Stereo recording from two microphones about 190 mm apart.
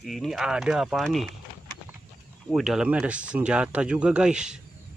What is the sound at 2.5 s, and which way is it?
Speech, centre (ahead or behind).